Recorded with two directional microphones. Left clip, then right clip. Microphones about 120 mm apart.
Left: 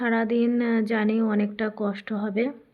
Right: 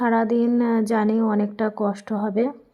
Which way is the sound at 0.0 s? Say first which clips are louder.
Right 4 dB; 35° right (ahead or behind).